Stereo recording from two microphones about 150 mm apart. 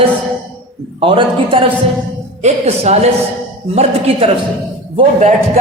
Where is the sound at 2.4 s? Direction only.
45° right (ahead or behind).